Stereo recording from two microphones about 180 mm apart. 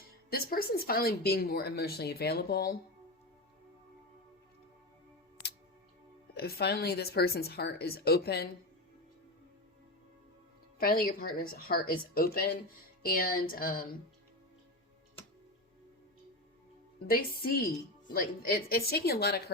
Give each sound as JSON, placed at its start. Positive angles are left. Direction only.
{"t": 0.3, "sound": "a woman's voice", "side_deg": 55}
{"t": 6.3, "sound": "a woman's voice", "side_deg": 60}
{"t": 10.8, "sound": "a woman's voice", "side_deg": 55}
{"t": 17.1, "sound": "a woman's voice", "side_deg": 55}